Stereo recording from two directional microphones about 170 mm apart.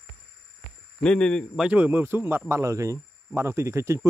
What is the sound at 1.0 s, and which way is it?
Speech, 5° left (ahead or behind).